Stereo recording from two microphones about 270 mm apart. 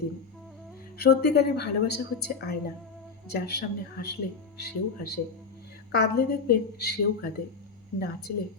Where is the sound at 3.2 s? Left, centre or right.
Left.